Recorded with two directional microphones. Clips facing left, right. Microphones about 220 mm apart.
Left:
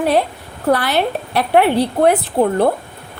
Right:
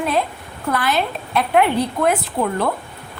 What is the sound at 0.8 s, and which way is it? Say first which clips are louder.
Speech: left 3 dB; 65° left (ahead or behind).